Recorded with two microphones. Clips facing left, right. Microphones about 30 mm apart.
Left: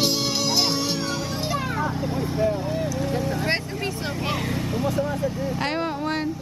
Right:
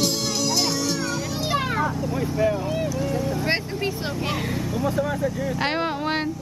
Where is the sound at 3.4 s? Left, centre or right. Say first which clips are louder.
Right 1 dB; centre.